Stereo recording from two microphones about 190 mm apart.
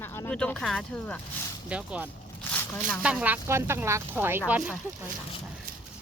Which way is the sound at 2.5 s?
10° left (ahead or behind).